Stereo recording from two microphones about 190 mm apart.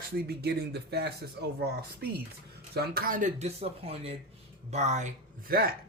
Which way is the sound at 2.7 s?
55° right (ahead or behind).